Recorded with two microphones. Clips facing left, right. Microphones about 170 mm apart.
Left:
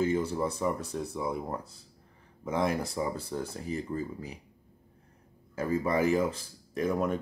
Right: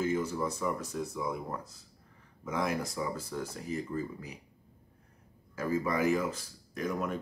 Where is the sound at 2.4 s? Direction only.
30° left (ahead or behind).